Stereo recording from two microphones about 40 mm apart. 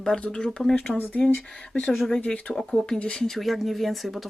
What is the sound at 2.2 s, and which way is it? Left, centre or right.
Speech, left.